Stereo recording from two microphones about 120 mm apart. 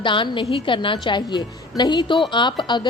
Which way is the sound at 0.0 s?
40° left (ahead or behind).